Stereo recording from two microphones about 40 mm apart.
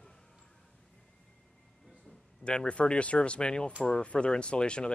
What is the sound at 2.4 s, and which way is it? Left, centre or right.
Speech, left.